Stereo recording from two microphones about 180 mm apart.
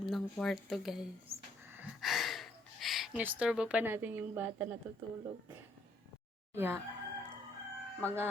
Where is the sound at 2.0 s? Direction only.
Centre (ahead or behind).